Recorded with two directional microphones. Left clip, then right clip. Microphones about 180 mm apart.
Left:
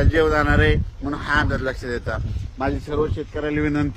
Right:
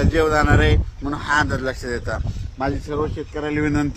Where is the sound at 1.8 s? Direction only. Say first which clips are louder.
Right 1 dB; 60° right (ahead or behind).